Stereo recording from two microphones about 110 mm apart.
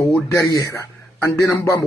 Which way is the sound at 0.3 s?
30° left (ahead or behind).